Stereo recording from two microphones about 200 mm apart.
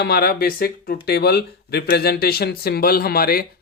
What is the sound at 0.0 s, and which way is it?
Speech, 50° left (ahead or behind).